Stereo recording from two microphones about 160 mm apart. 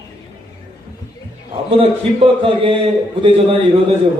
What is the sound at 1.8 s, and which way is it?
A man's voice, 35° right (ahead or behind).